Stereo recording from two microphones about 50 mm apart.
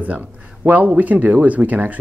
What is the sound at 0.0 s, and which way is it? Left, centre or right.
Speech, right.